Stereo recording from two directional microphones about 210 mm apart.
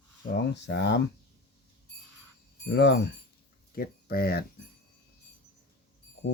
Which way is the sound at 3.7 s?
45° left (ahead or behind).